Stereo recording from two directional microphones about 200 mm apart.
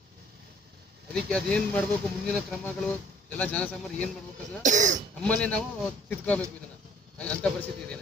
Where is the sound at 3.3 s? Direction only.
5° left (ahead or behind).